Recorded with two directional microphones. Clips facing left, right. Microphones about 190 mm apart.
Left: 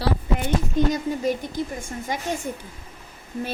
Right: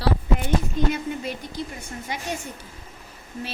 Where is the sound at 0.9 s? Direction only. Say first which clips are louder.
Left 5 dB; 40° left (ahead or behind).